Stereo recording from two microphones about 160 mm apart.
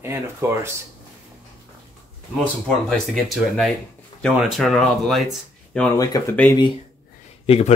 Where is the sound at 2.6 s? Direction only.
5° left (ahead or behind).